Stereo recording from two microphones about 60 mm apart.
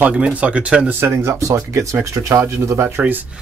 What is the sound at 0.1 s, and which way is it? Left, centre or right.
Speech, right.